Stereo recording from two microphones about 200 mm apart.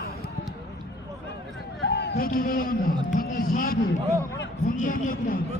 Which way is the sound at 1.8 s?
55° left (ahead or behind).